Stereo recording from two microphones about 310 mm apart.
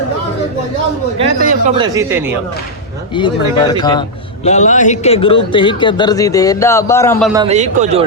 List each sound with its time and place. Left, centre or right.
1.2 s a man's voice: right
3.7 s a man's voice: centre
7.3 s a man's voice: right